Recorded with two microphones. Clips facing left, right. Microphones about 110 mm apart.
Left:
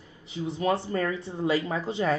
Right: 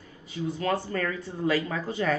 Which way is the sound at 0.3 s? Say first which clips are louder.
Left 1 dB; 20° left (ahead or behind).